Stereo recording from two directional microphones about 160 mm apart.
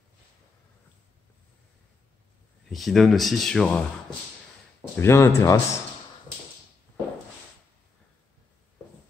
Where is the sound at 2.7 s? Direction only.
Centre (ahead or behind).